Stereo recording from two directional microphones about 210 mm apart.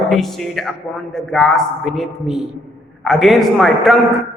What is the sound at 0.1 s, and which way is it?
A man's voice, centre (ahead or behind).